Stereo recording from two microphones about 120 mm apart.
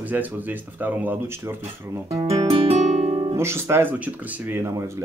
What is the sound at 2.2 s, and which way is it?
Guitar, 55° right (ahead or behind).